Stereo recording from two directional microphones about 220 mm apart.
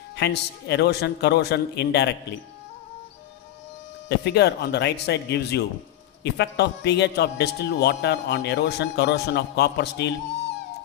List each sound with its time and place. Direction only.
0.2 s a man's voice: 50° left (ahead or behind)
4.1 s a man's voice: 50° left (ahead or behind)